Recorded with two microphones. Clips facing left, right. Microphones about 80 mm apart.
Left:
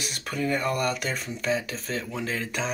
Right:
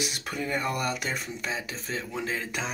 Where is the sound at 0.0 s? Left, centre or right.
Centre.